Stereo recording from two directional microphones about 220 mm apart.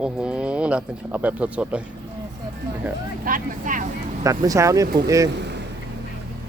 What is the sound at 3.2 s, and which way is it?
Speech, 40° right (ahead or behind).